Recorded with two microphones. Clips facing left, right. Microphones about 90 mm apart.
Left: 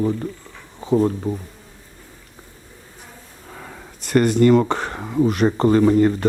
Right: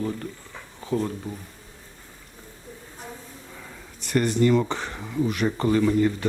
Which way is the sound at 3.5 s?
55° left (ahead or behind).